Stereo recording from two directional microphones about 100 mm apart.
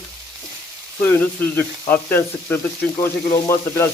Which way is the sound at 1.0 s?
20° left (ahead or behind).